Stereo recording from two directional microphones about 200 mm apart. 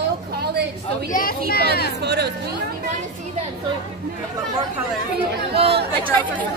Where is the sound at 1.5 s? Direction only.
50° left (ahead or behind).